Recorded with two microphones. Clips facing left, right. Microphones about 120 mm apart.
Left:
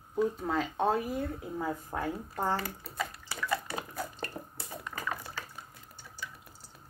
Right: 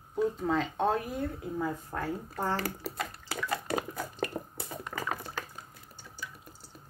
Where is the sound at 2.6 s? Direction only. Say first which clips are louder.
Right 2 dB; 90° right.